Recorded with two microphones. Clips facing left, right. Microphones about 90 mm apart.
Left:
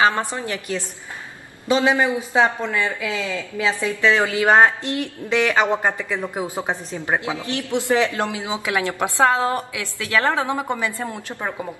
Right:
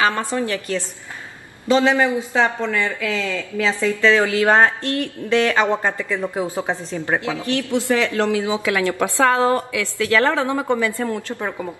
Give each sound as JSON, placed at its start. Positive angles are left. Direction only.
{"t": 0.0, "sound": "a woman's voice", "side_deg": 20}